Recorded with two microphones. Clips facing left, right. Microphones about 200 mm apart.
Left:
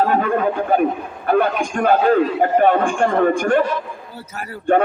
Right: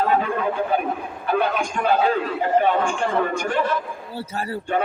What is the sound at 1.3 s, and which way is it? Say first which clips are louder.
A man's voice: left 5 dB; 50° left (ahead or behind).